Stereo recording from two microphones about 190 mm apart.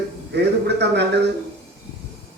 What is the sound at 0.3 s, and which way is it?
Speech, 60° right (ahead or behind).